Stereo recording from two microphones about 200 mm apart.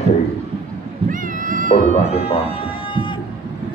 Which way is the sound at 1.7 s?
30° left (ahead or behind).